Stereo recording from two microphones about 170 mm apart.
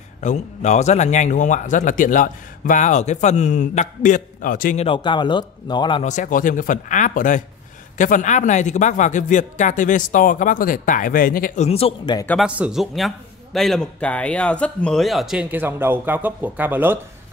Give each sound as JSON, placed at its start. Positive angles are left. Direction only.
{"t": 0.2, "sound": "a man's voice", "side_deg": 45}
{"t": 4.8, "sound": "speech", "side_deg": 30}
{"t": 6.0, "sound": "a man's voice", "side_deg": 50}
{"t": 11.6, "sound": "speech", "side_deg": 35}
{"t": 12.4, "sound": "a man's voice", "side_deg": -5}